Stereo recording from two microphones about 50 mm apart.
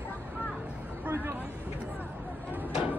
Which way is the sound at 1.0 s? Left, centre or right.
Right.